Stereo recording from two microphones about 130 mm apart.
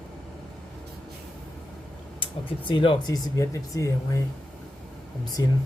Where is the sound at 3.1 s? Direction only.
25° left (ahead or behind).